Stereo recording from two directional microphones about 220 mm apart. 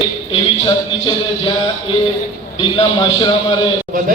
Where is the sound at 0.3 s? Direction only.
20° left (ahead or behind).